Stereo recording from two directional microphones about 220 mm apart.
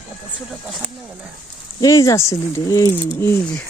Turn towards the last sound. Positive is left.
turn(degrees=10)  # may be behind; listen again after turning